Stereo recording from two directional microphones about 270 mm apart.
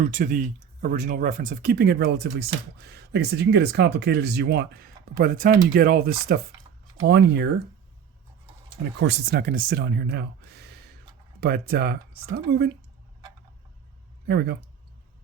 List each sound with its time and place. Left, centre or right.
0.0 s speech: right
9.0 s speech: right
14.3 s speech: right